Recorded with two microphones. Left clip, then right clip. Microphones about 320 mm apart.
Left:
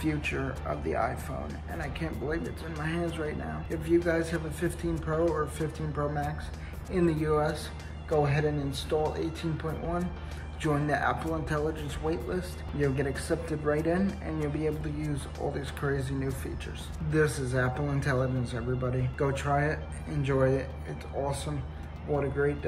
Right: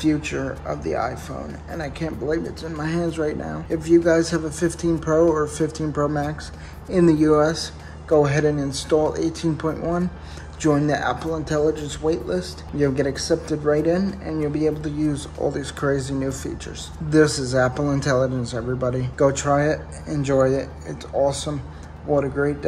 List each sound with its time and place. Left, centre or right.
0.0 s speech: centre
22.2 s speech: centre